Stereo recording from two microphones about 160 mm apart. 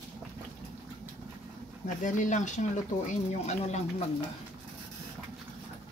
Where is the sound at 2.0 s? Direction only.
50° left (ahead or behind).